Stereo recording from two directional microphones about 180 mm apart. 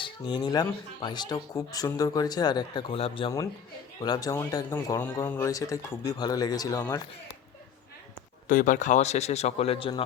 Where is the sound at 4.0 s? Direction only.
20° left (ahead or behind).